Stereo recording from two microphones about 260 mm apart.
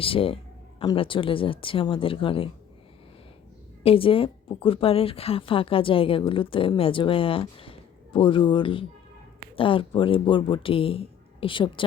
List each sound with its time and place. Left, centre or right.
0.0 s speech: left
3.8 s speech: left